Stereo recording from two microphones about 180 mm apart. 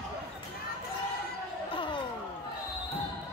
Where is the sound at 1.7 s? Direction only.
25° left (ahead or behind).